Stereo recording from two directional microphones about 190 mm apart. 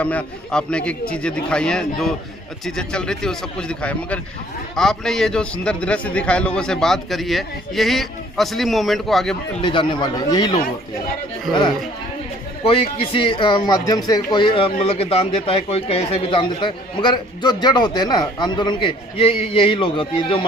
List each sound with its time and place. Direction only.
0.0 s a man's voice: 5° left (ahead or behind)
9.6 s speech: 25° left (ahead or behind)
13.1 s speech: 30° left (ahead or behind)